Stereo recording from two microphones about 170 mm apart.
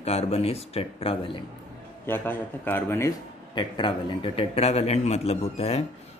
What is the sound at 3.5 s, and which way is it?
Speech, 25° left (ahead or behind).